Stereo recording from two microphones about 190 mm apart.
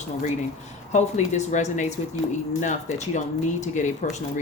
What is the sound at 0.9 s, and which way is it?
Speech, 40° left (ahead or behind).